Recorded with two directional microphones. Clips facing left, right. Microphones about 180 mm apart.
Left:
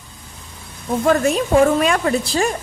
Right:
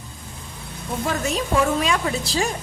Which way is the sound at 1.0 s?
55° left (ahead or behind).